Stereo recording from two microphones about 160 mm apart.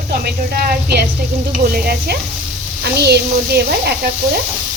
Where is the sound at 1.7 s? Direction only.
70° right (ahead or behind).